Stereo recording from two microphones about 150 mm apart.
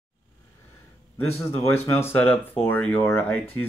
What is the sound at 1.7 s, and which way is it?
Speech, 15° left (ahead or behind).